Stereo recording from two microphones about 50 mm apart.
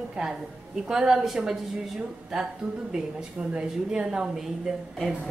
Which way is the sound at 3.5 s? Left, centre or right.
Centre.